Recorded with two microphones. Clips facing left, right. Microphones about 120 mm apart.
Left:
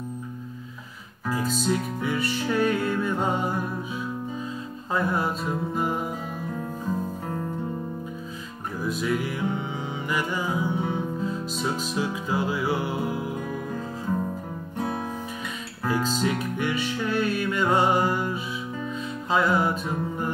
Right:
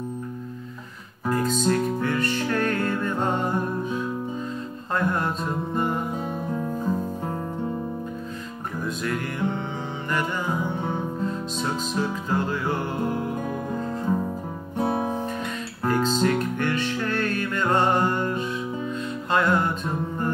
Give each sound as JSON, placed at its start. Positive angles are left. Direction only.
{"t": 1.3, "sound": "music", "side_deg": 5}
{"t": 8.8, "sound": "music", "side_deg": 5}
{"t": 14.8, "sound": "music", "side_deg": -30}
{"t": 15.9, "sound": "music", "side_deg": 5}